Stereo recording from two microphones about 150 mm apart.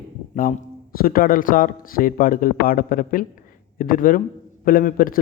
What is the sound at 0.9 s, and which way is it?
Speech, 80° left.